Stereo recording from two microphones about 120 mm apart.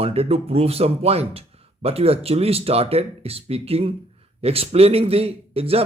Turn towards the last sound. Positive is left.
turn(degrees=-55)  # may be behind; listen again after turning